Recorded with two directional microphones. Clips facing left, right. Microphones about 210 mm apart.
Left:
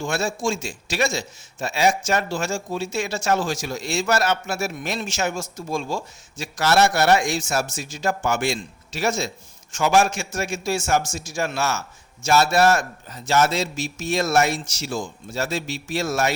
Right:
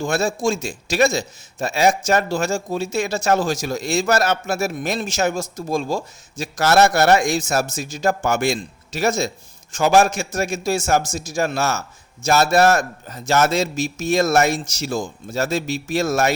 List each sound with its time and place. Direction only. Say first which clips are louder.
0.0 s speech: right 4 dB; 40° right (ahead or behind)